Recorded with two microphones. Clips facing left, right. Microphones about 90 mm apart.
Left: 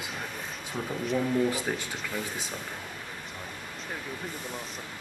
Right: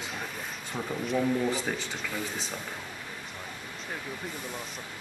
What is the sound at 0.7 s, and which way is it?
Speech, centre (ahead or behind).